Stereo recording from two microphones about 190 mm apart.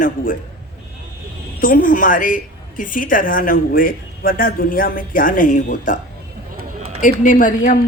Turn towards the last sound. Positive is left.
turn(degrees=45)  # may be behind; listen again after turning